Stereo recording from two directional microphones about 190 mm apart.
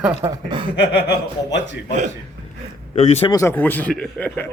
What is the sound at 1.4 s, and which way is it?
Speech, 70° left (ahead or behind).